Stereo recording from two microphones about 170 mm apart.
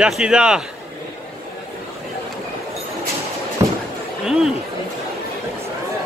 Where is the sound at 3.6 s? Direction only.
20° right (ahead or behind).